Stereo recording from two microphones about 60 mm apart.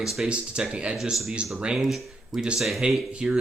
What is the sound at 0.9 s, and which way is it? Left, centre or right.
Speech, centre.